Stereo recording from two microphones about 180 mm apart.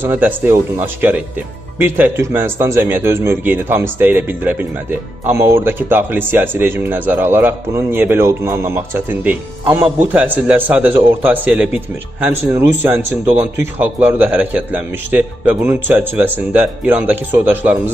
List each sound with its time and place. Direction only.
0.0 s speech: 10° right (ahead or behind)
13.2 s speech: 35° right (ahead or behind)
13.6 s speech: 10° right (ahead or behind)